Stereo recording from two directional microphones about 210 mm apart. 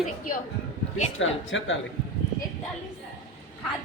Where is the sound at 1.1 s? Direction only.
65° left (ahead or behind).